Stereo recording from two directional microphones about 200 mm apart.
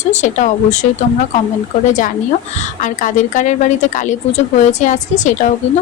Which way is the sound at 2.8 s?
40° left (ahead or behind).